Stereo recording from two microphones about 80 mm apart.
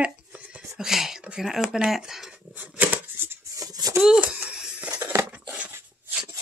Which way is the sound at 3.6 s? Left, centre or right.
Right.